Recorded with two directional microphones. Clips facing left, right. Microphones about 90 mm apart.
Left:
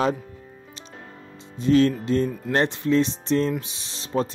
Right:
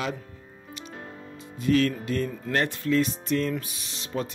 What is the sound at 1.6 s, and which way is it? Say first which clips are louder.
Speech: left 4 dB; 30° left (ahead or behind).